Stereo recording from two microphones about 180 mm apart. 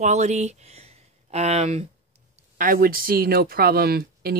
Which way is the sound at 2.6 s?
55° right (ahead or behind).